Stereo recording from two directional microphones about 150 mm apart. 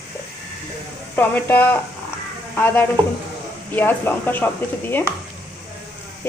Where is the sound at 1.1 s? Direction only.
10° left (ahead or behind).